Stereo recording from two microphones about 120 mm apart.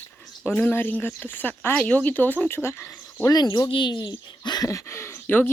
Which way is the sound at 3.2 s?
35° left (ahead or behind).